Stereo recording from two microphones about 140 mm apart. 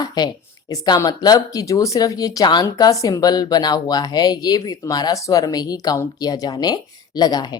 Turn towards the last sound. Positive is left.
turn(degrees=30)  # may be behind; listen again after turning